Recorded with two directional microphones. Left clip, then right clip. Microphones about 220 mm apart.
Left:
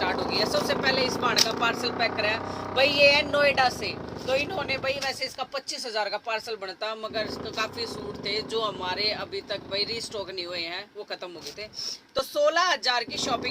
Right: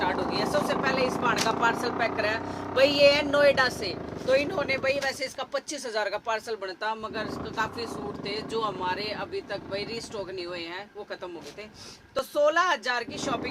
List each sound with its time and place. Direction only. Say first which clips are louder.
0.0 s speech: left 1 dB; 15° right (ahead or behind)
6.8 s speech: left 1 dB; 10° right (ahead or behind)
12.1 s speech: even; 10° right (ahead or behind)